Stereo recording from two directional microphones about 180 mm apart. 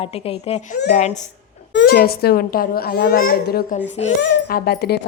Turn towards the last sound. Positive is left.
turn(degrees=60)  # may be behind; listen again after turning